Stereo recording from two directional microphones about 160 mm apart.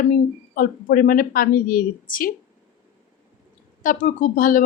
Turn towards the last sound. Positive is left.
turn(degrees=55)  # may be behind; listen again after turning